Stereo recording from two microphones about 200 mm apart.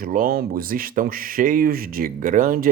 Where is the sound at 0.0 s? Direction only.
45° right (ahead or behind).